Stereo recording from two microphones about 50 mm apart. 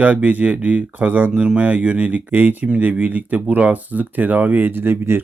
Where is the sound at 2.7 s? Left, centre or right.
Right.